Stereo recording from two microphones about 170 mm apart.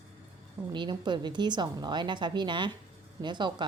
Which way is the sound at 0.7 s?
25° right (ahead or behind).